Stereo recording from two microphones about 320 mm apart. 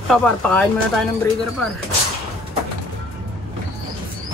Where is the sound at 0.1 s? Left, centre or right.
Centre.